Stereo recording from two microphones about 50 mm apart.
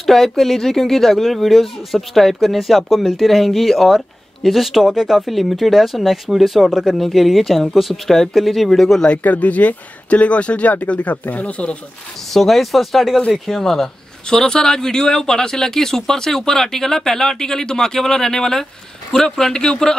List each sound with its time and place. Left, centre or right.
0.0 s speech: centre
9.2 s speech: left
12.3 s speech: centre